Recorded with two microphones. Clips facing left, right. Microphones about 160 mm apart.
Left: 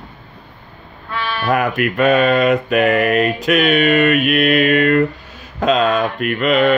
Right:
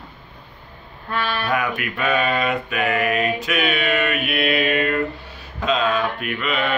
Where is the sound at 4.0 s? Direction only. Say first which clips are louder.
Left 8 dB; 60° left (ahead or behind).